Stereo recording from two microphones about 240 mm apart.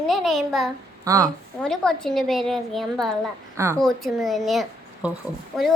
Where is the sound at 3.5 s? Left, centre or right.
Centre.